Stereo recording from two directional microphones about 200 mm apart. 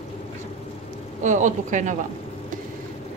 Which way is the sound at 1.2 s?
40° right (ahead or behind).